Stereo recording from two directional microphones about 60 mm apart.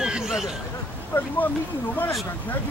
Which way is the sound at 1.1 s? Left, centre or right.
Left.